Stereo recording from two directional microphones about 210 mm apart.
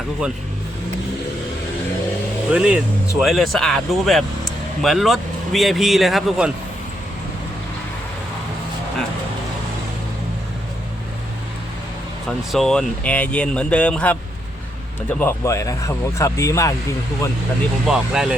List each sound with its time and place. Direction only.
2.5 s speech: 5° right (ahead or behind)
12.5 s speech: centre (ahead or behind)
15.2 s speech: 10° left (ahead or behind)
17.8 s speech: 5° right (ahead or behind)